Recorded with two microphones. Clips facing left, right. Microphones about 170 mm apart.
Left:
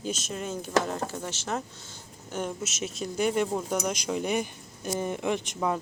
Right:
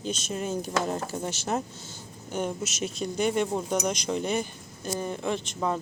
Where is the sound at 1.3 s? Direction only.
10° right (ahead or behind).